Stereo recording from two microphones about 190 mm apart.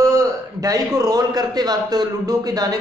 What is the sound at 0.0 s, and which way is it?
A man's voice, 15° right (ahead or behind).